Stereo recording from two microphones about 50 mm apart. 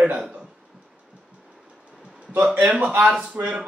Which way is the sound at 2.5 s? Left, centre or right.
Right.